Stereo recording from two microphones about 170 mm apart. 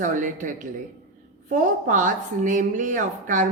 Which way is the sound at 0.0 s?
50° right (ahead or behind).